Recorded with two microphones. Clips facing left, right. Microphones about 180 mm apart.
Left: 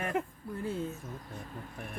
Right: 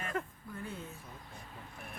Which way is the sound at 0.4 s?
35° left (ahead or behind).